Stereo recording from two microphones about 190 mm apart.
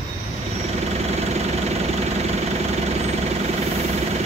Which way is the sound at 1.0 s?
35° right (ahead or behind).